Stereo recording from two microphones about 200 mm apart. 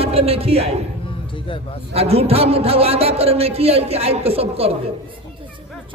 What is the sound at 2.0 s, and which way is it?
A man's voice, 30° right (ahead or behind).